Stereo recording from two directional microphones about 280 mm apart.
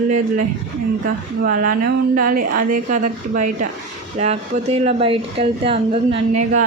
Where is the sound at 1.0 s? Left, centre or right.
Right.